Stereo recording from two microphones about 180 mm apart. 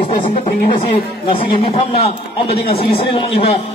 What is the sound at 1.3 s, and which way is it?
A man's voice, 30° left (ahead or behind).